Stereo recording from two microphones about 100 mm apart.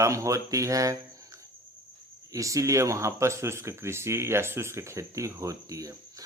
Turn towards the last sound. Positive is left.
turn(degrees=-35)  # may be behind; listen again after turning